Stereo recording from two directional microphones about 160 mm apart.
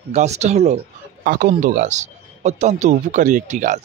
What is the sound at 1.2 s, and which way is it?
A man's voice, 55° right (ahead or behind).